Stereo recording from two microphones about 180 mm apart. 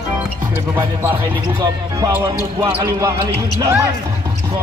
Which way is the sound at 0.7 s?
10° right (ahead or behind).